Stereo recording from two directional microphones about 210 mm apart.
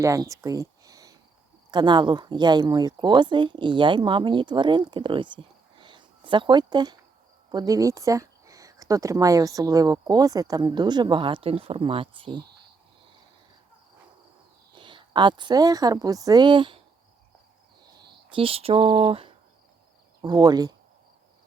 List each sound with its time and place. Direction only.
0.0 s speech: 15° right (ahead or behind)
5.8 s a sound: 20° right (ahead or behind)
7.5 s speech: 15° right (ahead or behind)
14.8 s a woman's voice: 25° right (ahead or behind)
18.0 s speech: 25° right (ahead or behind)